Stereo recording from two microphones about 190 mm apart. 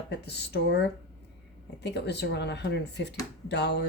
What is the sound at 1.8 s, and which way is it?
Speech, 60° left (ahead or behind).